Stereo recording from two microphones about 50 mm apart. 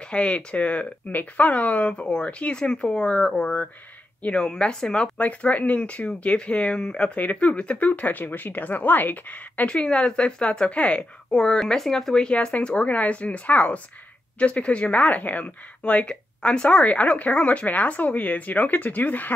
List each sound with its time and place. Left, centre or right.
0.1 s speech: left
5.1 s speech: left
9.8 s speech: centre; by 19.3 s left